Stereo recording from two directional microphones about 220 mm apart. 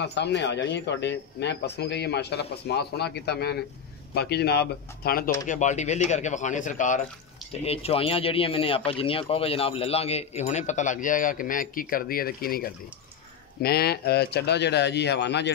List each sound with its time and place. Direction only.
0.0 s speech: 50° left (ahead or behind)
5.5 s speech: 35° left (ahead or behind); by 15.5 s 50° left (ahead or behind)